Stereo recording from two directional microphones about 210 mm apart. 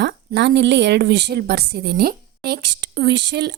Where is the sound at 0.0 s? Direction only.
55° right (ahead or behind).